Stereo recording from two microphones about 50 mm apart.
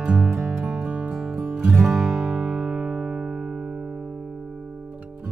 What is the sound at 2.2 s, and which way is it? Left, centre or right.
Music, right.